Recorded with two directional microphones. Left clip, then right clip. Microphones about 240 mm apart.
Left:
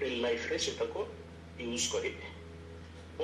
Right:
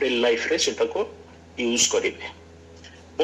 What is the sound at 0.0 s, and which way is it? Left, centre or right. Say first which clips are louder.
A man's voice: right 11 dB; right.